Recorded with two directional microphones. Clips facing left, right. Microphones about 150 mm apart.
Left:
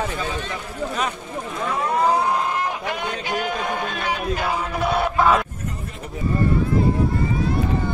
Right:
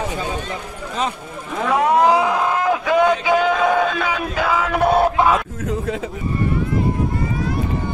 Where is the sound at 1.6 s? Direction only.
80° right.